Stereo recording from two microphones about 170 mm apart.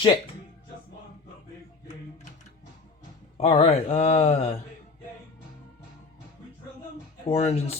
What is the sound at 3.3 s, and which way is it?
Speech, 40° left (ahead or behind).